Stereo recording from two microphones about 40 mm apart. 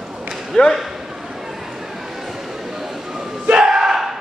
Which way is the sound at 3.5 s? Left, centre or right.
Centre.